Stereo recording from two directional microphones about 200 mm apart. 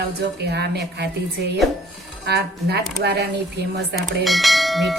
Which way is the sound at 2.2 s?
55° right (ahead or behind).